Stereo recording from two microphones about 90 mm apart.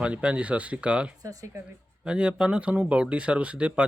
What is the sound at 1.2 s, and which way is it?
Speech, 40° right (ahead or behind).